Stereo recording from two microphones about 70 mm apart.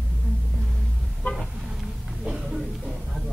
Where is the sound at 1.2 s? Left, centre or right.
Left.